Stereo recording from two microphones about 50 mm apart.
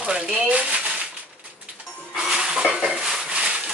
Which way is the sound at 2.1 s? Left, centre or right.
Centre.